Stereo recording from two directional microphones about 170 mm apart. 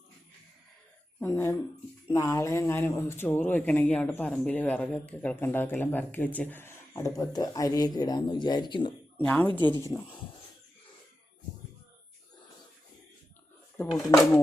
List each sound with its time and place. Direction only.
1.2 s speech: 15° left (ahead or behind)
9.1 s speech: 10° left (ahead or behind)
9.6 s speech: 25° right (ahead or behind)
13.8 s speech: 15° left (ahead or behind)